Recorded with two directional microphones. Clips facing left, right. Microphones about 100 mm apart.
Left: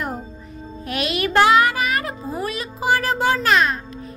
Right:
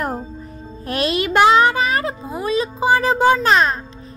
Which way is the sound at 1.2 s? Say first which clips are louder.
Right 2 dB; 20° right (ahead or behind).